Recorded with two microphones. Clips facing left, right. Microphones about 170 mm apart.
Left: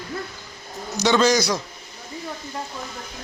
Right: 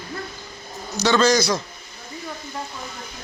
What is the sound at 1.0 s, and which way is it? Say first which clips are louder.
Speech: even; 15° left (ahead or behind).